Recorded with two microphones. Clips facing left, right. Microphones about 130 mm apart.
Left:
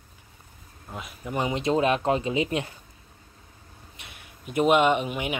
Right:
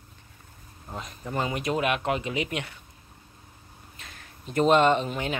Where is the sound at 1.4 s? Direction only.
25° left (ahead or behind).